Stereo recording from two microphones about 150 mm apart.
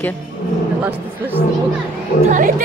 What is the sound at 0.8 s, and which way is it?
Speech, 10° right (ahead or behind).